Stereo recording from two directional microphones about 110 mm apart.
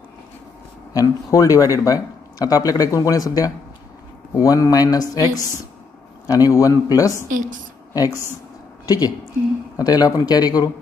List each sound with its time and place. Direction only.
0.9 s speech: 30° left (ahead or behind)